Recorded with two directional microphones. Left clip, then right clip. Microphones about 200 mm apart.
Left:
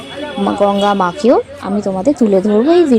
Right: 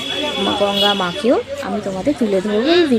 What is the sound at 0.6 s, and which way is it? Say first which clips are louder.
Speech: left 5 dB; 5° left (ahead or behind).